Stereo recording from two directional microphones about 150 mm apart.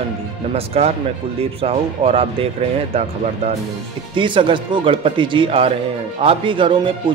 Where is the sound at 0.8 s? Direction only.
40° right (ahead or behind).